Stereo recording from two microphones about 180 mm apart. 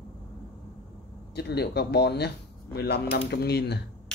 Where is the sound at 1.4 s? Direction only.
65° left (ahead or behind).